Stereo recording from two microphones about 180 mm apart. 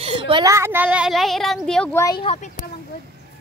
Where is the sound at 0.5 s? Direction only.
10° right (ahead or behind); by 1.9 s 5° left (ahead or behind).